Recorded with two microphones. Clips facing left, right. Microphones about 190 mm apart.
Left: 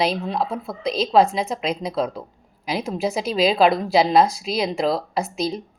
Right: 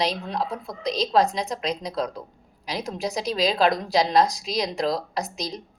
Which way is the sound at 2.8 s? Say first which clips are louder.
Left 3 dB; 5° left (ahead or behind).